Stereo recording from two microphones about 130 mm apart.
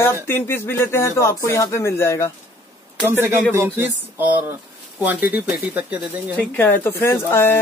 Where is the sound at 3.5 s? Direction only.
15° right (ahead or behind).